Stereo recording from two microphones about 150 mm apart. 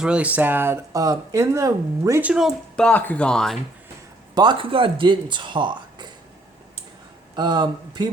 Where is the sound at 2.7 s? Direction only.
10° left (ahead or behind).